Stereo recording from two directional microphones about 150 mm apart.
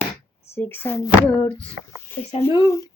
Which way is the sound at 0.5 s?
15° left (ahead or behind).